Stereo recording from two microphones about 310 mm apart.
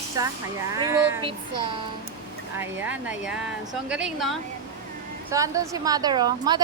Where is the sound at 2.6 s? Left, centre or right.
Centre.